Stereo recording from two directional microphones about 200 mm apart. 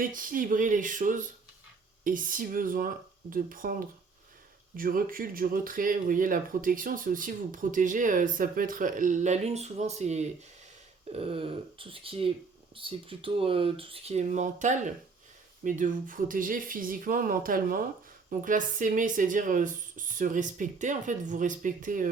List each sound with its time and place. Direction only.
0.0 s speech: 45° right (ahead or behind)